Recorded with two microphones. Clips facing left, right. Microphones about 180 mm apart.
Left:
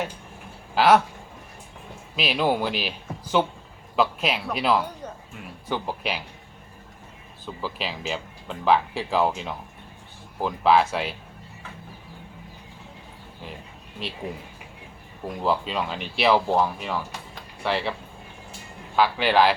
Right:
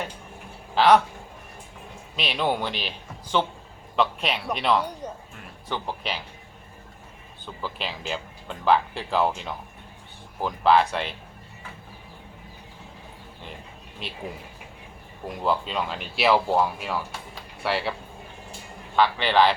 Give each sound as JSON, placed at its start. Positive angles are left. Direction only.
{"t": 0.8, "sound": "speech", "side_deg": 5}
{"t": 2.1, "sound": "speech", "side_deg": 5}
{"t": 7.4, "sound": "speech", "side_deg": 0}
{"t": 14.0, "sound": "speech", "side_deg": 0}
{"t": 15.4, "sound": "speech", "side_deg": 0}
{"t": 18.9, "sound": "speech", "side_deg": 5}